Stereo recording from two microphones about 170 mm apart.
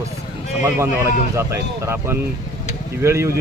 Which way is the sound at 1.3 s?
15° right (ahead or behind).